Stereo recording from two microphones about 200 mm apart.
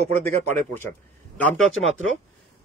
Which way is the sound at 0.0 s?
30° right (ahead or behind).